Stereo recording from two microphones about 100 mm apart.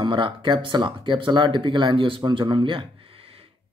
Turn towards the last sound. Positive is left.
turn(degrees=-70)  # may be behind; listen again after turning